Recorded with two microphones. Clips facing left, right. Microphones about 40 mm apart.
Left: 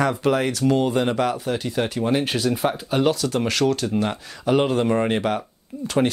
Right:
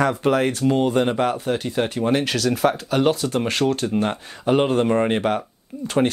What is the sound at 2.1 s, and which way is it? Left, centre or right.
Speech, right.